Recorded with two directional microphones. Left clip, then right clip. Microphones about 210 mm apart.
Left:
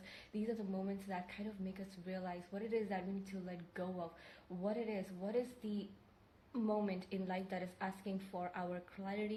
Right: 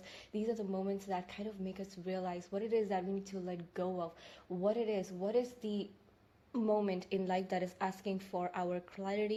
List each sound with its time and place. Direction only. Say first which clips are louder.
0.3 s speech: right 5 dB; 35° right (ahead or behind)